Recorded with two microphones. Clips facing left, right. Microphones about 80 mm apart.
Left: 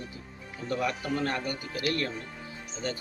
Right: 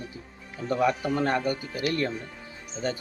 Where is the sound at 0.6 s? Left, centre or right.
Centre.